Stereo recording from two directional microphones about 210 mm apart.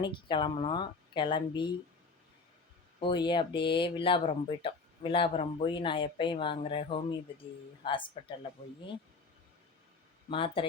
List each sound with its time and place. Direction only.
0.0 s speech: 20° left (ahead or behind)
3.0 s speech: 20° left (ahead or behind)
10.2 s speech: 25° left (ahead or behind)